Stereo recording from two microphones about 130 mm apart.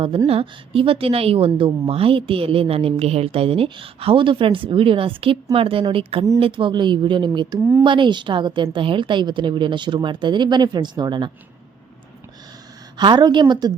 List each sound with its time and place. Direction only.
0.3 s a woman's voice: 45° right (ahead or behind)
13.0 s a woman's voice: 35° right (ahead or behind)